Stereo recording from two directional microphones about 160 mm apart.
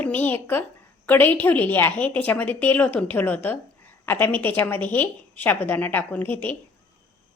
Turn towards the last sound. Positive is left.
turn(degrees=10)  # may be behind; listen again after turning